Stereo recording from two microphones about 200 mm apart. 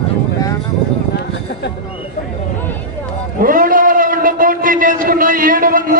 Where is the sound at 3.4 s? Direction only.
45° right (ahead or behind).